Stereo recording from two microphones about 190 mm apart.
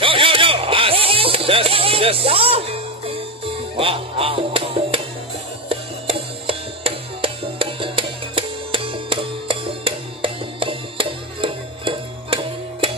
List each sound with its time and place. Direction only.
0.0 s music: 25° right (ahead or behind)